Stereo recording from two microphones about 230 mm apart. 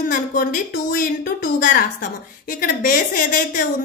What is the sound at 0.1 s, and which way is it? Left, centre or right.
A woman's voice, left.